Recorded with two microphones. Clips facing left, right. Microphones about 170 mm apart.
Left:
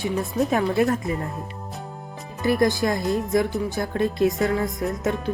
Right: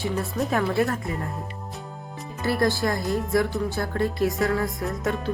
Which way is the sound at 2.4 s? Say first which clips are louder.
Left 3 dB; 15° left (ahead or behind).